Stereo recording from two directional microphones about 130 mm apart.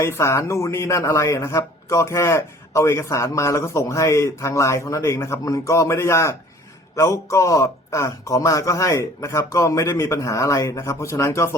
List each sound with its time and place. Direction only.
0.0 s speech: 20° left (ahead or behind)